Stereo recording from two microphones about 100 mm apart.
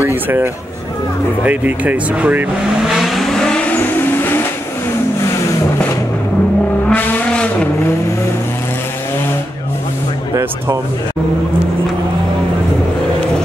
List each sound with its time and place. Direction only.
0.0 s a sound: 20° right (ahead or behind)
1.4 s speech: 15° right (ahead or behind)
3.0 s vehicle: centre (ahead or behind); by 4.5 s 20° left (ahead or behind)
6.9 s vehicle: 15° left (ahead or behind)